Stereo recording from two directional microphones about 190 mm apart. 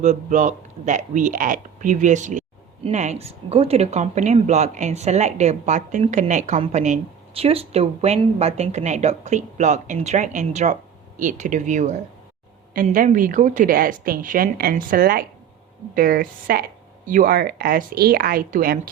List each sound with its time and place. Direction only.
0.0 s a woman's voice: 40° right (ahead or behind)